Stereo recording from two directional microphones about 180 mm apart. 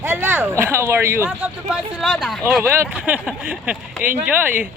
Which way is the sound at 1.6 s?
Centre (ahead or behind).